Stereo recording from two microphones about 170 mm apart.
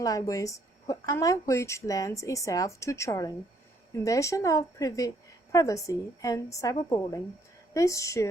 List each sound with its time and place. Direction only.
0.0 s a woman's voice: 20° left (ahead or behind)
7.7 s a woman's voice: 20° left (ahead or behind)